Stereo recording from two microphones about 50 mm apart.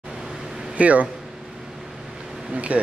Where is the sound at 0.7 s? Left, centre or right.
Right.